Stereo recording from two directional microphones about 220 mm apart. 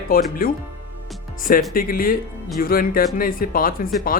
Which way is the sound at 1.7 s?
40° left (ahead or behind).